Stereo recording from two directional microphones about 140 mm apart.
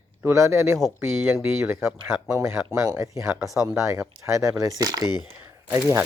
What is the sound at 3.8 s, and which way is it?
Speech, 20° right (ahead or behind).